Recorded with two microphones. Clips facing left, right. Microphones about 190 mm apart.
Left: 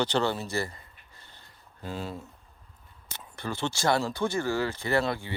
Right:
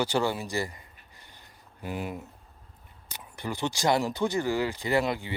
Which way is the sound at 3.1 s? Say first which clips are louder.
Even; 15° right (ahead or behind).